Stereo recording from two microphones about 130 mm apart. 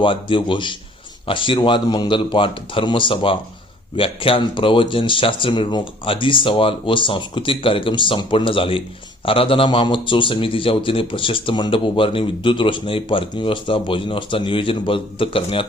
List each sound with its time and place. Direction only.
0.0 s a man's voice: 40° left (ahead or behind)